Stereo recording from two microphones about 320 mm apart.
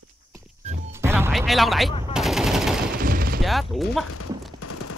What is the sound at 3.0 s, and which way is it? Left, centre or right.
Gunshot, right.